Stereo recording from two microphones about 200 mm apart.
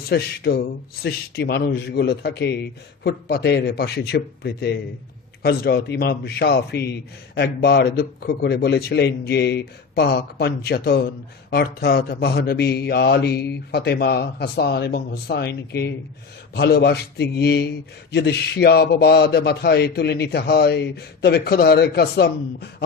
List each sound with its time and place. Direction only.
0.1 s a man's voice: 55° left (ahead or behind)